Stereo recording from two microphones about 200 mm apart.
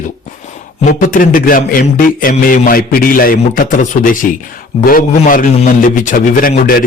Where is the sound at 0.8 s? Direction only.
40° left (ahead or behind).